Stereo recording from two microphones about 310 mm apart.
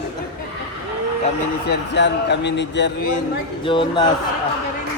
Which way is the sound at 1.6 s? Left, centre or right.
Left.